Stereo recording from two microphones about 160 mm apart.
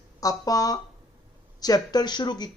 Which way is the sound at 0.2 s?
20° left (ahead or behind).